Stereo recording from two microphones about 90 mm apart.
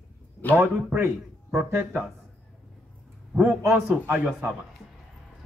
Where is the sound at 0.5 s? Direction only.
25° right (ahead or behind).